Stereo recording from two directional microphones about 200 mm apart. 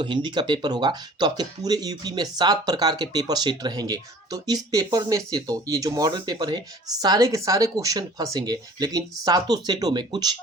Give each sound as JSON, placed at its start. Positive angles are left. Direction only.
{"t": 0.0, "sound": "speech", "side_deg": -20}